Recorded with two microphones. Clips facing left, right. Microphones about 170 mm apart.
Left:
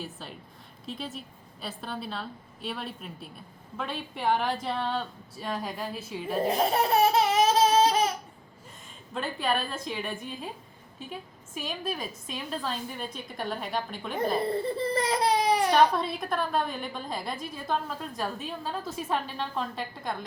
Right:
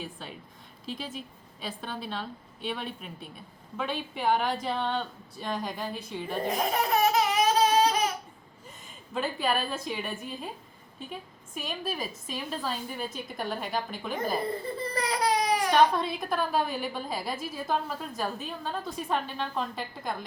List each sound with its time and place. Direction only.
0.0 s a woman's voice: centre (ahead or behind)
6.7 s laughter: 30° left (ahead or behind)
9.1 s a woman's voice: centre (ahead or behind)
14.8 s baby cry: 30° left (ahead or behind)
15.7 s a woman's voice: centre (ahead or behind)